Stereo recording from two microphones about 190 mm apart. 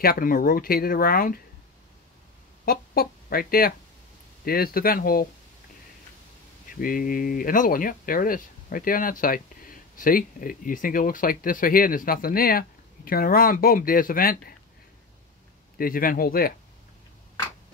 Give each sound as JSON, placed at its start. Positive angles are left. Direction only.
{"t": 0.0, "sound": "speech", "side_deg": 50}
{"t": 2.6, "sound": "speech", "side_deg": 50}
{"t": 6.7, "sound": "speech", "side_deg": 50}
{"t": 15.8, "sound": "speech", "side_deg": 50}